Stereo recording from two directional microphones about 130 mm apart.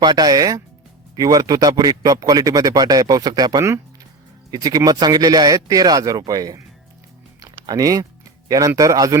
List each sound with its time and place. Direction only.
0.0 s a man's voice: 35° right (ahead or behind)
7.3 s music: 25° right (ahead or behind)
8.4 s a man's voice: 30° right (ahead or behind)